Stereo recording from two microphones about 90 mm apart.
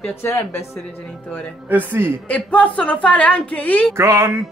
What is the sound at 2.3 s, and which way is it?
A woman's voice, 15° left (ahead or behind).